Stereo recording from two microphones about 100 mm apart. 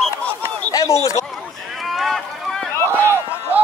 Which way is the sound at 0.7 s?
35° left (ahead or behind).